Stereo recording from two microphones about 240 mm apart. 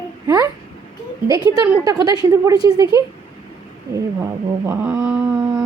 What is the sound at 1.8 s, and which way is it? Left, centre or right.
A woman's voice, centre.